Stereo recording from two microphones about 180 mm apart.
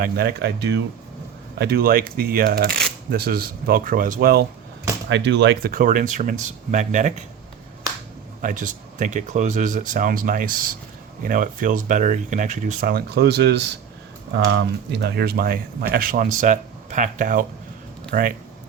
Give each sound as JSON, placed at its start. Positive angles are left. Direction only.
{"t": 0.0, "sound": "speech", "side_deg": -60}
{"t": 5.0, "sound": "speech", "side_deg": -80}
{"t": 5.7, "sound": "speech", "side_deg": -45}
{"t": 8.4, "sound": "speech", "side_deg": -45}
{"t": 12.9, "sound": "speech", "side_deg": -60}